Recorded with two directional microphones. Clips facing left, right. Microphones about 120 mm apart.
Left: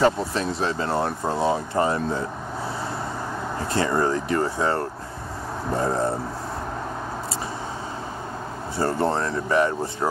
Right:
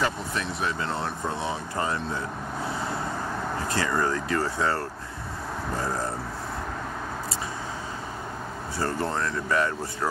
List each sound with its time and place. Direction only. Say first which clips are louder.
0.0 s speech: left 7 dB; 35° left (ahead or behind)
3.7 s speech: left 5 dB; 25° left (ahead or behind)
8.7 s speech: left 5 dB; 30° left (ahead or behind)